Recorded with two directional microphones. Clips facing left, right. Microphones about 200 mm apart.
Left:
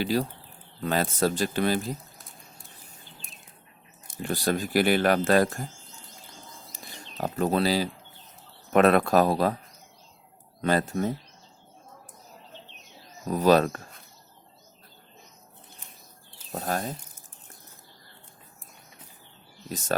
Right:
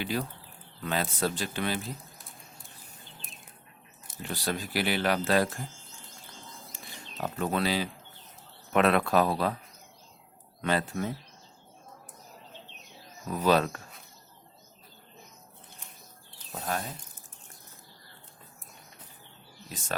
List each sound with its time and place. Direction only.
0.0 s speech: 35° left (ahead or behind)
4.2 s speech: 50° left (ahead or behind)
6.7 s a sound: 40° left (ahead or behind)
8.7 s speech: 45° left (ahead or behind)
10.6 s speech: 40° left (ahead or behind)
13.2 s speech: 40° left (ahead or behind)
16.5 s speech: 45° left (ahead or behind)